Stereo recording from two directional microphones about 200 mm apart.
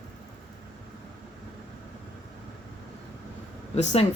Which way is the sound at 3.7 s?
35° left (ahead or behind).